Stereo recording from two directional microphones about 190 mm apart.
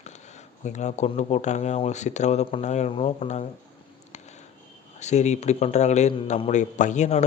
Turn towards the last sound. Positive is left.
turn(degrees=35)  # may be behind; listen again after turning